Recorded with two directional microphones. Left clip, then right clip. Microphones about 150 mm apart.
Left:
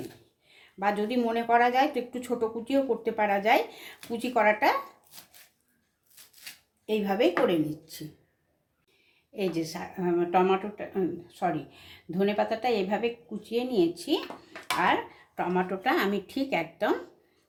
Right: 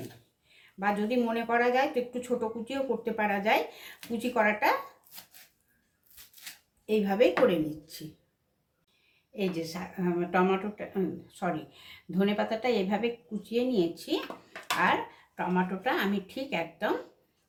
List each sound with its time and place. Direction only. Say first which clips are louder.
0.8 s speech: left 1 dB; 35° left (ahead or behind)
6.8 s speech: right 1 dB; 30° left (ahead or behind)
9.3 s a woman's voice: left 2 dB; 25° left (ahead or behind)
15.4 s speech: left 2 dB; 50° left (ahead or behind)